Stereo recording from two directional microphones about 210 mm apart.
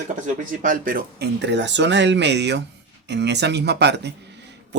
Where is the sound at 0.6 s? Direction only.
40° right (ahead or behind).